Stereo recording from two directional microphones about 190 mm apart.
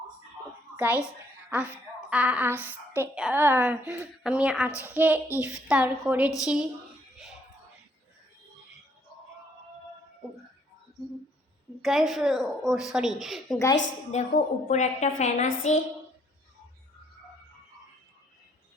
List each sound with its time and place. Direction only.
0.4 s a sound: 10° right (ahead or behind)
1.5 s a woman's voice: 10° right (ahead or behind)
11.8 s a woman's voice: centre (ahead or behind)
14.1 s a woman's voice: 40° left (ahead or behind)
15.4 s a woman's voice: 90° left